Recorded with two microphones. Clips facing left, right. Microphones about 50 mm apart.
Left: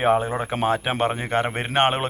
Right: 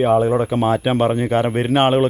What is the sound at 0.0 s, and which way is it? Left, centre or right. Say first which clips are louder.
Speech: right 4 dB; left.